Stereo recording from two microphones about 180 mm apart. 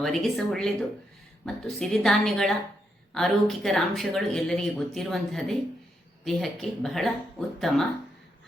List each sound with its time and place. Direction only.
0.0 s speech: centre (ahead or behind)